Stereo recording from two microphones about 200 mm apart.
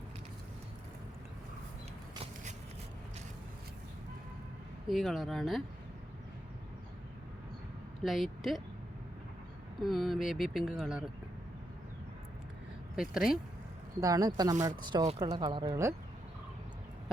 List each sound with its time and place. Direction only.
4.9 s speech: centre (ahead or behind)
8.0 s a woman's voice: centre (ahead or behind)
9.8 s speech: centre (ahead or behind)
13.0 s speech: centre (ahead or behind)
14.0 s speech: 20° right (ahead or behind)